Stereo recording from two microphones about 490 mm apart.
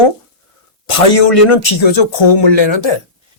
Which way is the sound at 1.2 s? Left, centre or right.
Left.